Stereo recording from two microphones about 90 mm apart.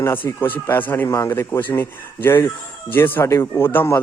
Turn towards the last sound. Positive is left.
turn(degrees=25)  # may be behind; listen again after turning